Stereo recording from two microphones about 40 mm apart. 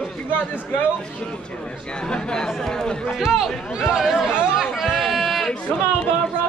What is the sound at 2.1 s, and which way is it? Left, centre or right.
Speech, centre.